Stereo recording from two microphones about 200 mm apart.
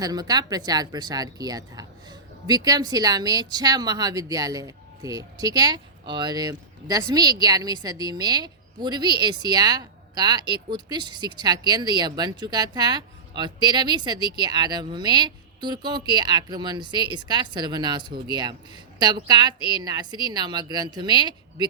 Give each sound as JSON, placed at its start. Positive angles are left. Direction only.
{"t": 0.0, "sound": "speech", "side_deg": -20}